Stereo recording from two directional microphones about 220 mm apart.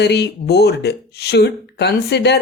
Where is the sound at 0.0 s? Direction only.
50° left (ahead or behind).